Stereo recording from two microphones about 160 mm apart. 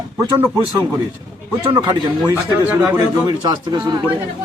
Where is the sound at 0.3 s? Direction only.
10° right (ahead or behind).